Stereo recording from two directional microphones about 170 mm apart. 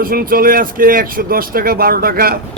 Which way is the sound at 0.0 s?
60° right (ahead or behind).